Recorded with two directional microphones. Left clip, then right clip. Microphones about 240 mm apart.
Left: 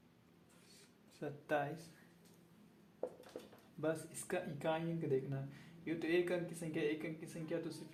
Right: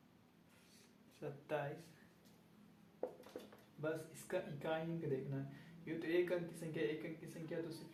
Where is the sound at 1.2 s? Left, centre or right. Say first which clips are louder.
Left 4 dB; left.